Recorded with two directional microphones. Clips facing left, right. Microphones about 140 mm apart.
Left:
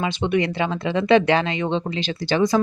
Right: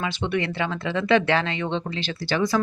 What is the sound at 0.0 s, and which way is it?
Speech, 20° left (ahead or behind).